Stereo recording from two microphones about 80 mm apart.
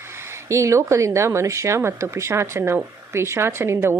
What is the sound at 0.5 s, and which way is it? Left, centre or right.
Speech, right.